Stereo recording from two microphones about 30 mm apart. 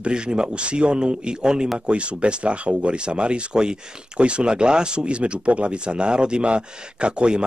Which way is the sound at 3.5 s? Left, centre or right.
Right.